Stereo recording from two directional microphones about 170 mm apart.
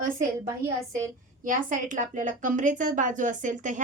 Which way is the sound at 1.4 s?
50° right (ahead or behind).